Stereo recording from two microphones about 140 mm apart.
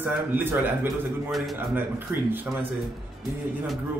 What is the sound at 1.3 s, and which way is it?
Speech, centre (ahead or behind).